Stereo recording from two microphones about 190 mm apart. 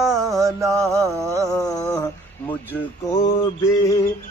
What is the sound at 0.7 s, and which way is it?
Mantra, 15° right (ahead or behind).